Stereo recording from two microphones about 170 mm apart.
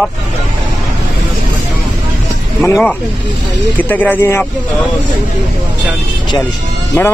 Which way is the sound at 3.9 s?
10° left (ahead or behind).